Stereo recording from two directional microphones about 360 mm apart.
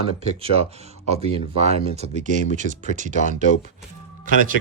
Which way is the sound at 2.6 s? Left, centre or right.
Left.